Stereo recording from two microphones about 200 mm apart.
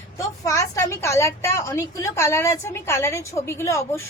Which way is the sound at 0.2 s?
15° left (ahead or behind).